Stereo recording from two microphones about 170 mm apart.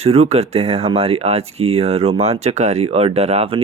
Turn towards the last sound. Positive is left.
turn(degrees=-35)  # may be behind; listen again after turning